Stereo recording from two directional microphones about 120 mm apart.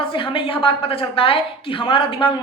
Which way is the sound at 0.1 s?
45° left (ahead or behind).